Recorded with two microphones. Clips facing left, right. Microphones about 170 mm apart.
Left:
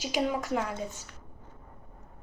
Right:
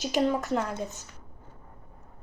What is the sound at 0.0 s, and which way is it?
Speech, 10° left (ahead or behind).